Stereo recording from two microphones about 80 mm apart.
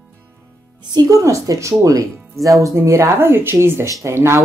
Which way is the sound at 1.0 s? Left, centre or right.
Right.